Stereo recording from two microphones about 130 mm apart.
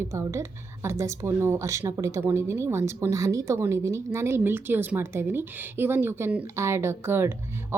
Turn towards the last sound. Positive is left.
turn(degrees=-20)  # may be behind; listen again after turning